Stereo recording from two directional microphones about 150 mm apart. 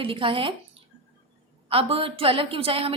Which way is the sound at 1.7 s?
40° right (ahead or behind).